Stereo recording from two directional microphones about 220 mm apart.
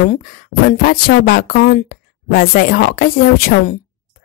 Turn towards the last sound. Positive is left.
turn(degrees=40)  # may be behind; listen again after turning